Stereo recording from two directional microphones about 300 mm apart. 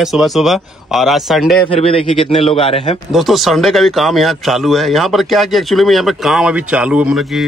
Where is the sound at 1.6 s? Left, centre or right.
Centre.